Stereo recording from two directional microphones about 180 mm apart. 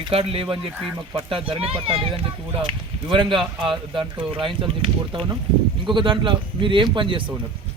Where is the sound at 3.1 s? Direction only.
30° right (ahead or behind).